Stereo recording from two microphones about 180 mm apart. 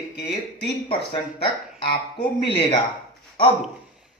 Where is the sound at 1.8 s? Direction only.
60° left (ahead or behind).